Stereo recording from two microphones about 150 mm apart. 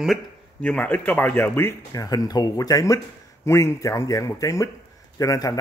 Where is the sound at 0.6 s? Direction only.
10° left (ahead or behind).